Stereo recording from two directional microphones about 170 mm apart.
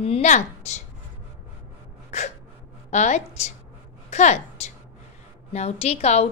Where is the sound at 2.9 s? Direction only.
45° left (ahead or behind).